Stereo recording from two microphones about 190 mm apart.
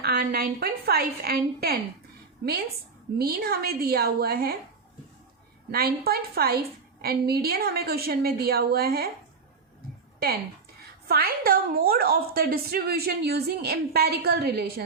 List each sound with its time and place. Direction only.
0.0 s a woman's voice: 55° right (ahead or behind)
3.2 s a woman's voice: 55° right (ahead or behind)
5.7 s a woman's voice: 55° right (ahead or behind)
11.1 s a woman's voice: 50° right (ahead or behind)